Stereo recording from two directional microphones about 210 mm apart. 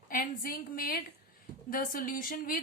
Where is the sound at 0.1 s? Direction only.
45° left (ahead or behind).